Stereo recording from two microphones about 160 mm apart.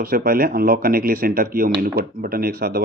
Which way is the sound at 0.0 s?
70° right (ahead or behind).